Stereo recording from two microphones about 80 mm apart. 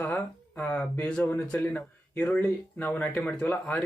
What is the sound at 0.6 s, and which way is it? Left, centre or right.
Speech, centre.